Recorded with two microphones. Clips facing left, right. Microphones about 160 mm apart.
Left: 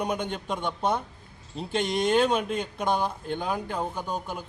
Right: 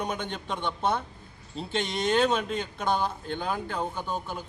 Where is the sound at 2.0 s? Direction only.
10° left (ahead or behind).